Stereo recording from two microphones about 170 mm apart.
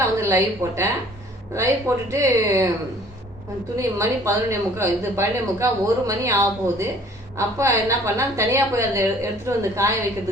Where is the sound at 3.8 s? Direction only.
15° right (ahead or behind).